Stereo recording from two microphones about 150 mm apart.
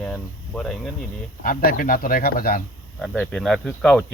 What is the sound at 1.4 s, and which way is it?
Speech, 75° left (ahead or behind).